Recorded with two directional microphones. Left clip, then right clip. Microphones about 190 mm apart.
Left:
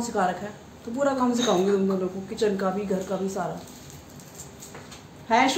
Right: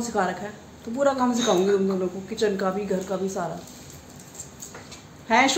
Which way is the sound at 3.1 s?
30° right (ahead or behind).